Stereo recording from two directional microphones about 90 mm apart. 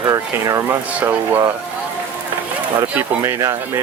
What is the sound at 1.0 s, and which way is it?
Speech, 25° right (ahead or behind).